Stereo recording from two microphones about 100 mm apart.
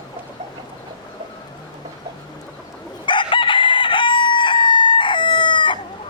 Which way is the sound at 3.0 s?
55° left (ahead or behind).